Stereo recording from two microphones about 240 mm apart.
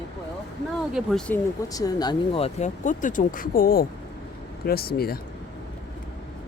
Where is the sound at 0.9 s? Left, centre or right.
Centre.